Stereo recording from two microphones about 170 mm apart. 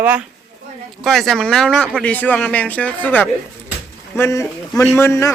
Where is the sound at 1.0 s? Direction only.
Centre (ahead or behind).